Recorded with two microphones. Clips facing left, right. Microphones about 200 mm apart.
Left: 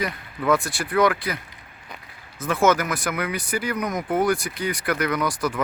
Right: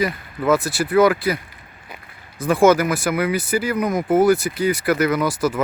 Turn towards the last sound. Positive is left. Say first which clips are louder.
# right 5 dB
turn(degrees=-5)  # may be behind; listen again after turning